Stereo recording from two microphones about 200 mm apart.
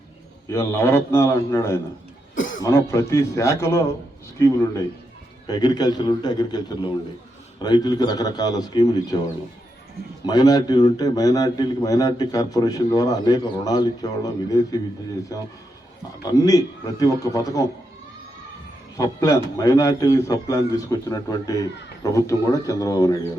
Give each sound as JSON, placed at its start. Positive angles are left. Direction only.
{"t": 0.5, "sound": "a man's voice", "side_deg": 10}
{"t": 2.3, "sound": "cough", "side_deg": 40}
{"t": 2.6, "sound": "a man's voice", "side_deg": 15}
{"t": 7.6, "sound": "a man's voice", "side_deg": 20}
{"t": 10.2, "sound": "a man's voice", "side_deg": 20}
{"t": 16.2, "sound": "a man's voice", "side_deg": 20}
{"t": 18.9, "sound": "a man's voice", "side_deg": 15}